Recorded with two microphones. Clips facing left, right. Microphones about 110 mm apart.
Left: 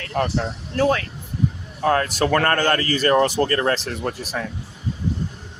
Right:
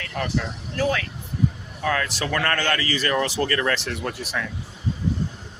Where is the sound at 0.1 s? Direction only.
35° left (ahead or behind).